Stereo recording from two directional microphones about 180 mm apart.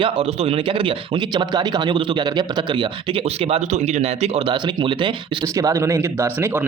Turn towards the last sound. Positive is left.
turn(degrees=-10)  # may be behind; listen again after turning